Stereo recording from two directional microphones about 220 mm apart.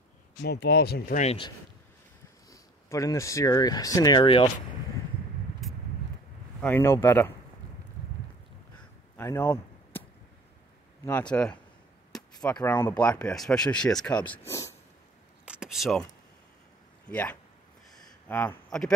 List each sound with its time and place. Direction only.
0.4 s speech: 50° left (ahead or behind)
1.2 s speech: 25° left (ahead or behind)
2.5 s speech: 15° left (ahead or behind)
5.6 s vehicle: centre (ahead or behind)
6.6 s speech: 10° left (ahead or behind)
9.1 s a sound: 10° left (ahead or behind)
11.1 s speech: 10° left (ahead or behind)
12.5 s speech: 10° left (ahead or behind)
15.4 s a sound: 5° right (ahead or behind)
17.1 s speech: 5° left (ahead or behind)
17.9 s a sound: 10° left (ahead or behind)